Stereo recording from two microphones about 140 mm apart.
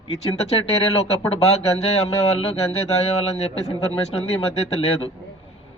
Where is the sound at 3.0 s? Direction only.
50° left (ahead or behind).